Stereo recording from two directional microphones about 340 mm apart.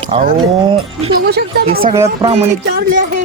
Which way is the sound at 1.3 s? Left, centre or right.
Right.